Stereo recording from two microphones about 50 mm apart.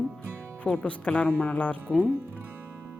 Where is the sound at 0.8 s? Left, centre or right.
Left.